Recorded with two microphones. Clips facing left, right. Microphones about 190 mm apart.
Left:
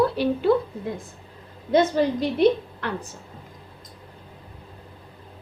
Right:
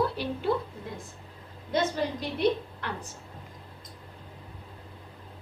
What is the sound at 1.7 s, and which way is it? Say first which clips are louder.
Speech: left 8 dB; 80° left.